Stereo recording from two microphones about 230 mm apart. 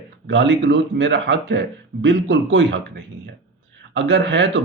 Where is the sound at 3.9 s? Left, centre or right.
Right.